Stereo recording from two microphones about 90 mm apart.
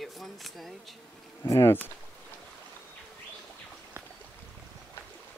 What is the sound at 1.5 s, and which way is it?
Speech, 30° left (ahead or behind).